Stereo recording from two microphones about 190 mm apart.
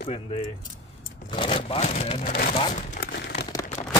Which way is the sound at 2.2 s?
45° left (ahead or behind).